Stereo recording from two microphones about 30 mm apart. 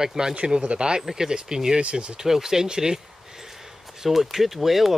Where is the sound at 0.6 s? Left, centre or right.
Right.